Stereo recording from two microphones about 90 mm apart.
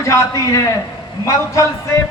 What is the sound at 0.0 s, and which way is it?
Music, 35° left (ahead or behind).